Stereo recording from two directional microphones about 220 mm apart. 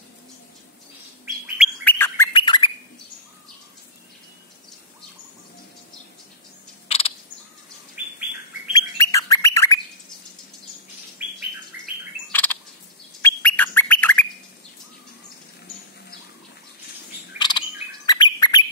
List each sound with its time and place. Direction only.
1.9 s bird: 10° left (ahead or behind)
2.3 s bird: 20° left (ahead or behind)
6.9 s bird: 25° left (ahead or behind)
8.0 s bird: 5° right (ahead or behind)
8.7 s bird: 15° left (ahead or behind)
11.2 s bird: 10° right (ahead or behind)
12.3 s a sound: 10° left (ahead or behind)
13.2 s bird: 10° left (ahead or behind)
17.4 s chirp: 20° left (ahead or behind)